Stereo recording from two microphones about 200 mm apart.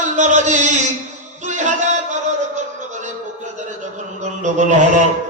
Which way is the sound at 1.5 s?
35° right (ahead or behind).